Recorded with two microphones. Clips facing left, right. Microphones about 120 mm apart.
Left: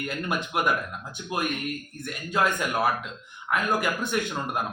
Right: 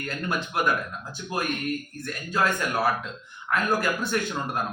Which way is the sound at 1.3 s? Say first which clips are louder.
Right 1 dB; 20° left (ahead or behind).